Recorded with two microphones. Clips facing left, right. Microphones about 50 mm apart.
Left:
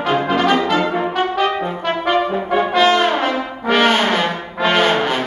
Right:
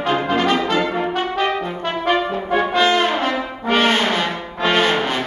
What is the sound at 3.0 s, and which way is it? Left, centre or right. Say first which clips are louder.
Brass instrument: left 2 dB; centre.